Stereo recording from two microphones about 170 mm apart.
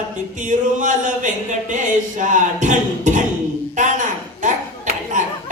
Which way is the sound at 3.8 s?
45° right (ahead or behind).